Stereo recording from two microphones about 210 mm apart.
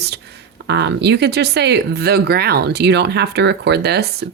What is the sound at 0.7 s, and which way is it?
Speech, 55° right (ahead or behind).